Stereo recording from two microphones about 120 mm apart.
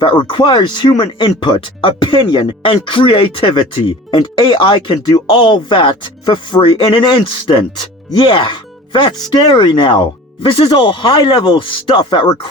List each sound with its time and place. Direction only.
0.0 s speech: 40° left (ahead or behind)